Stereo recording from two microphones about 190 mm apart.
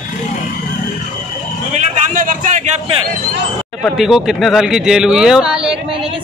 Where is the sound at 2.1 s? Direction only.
45° right (ahead or behind).